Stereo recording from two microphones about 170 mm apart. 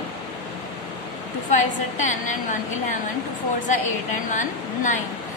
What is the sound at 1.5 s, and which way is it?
Speech, 45° left (ahead or behind).